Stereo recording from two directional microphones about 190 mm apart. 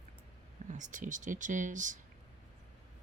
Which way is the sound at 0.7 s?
40° right (ahead or behind).